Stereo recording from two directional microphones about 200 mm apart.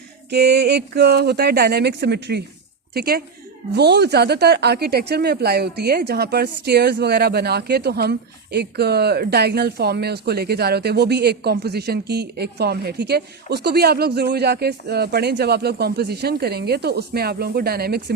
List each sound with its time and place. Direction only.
0.3 s speech: 55° right (ahead or behind)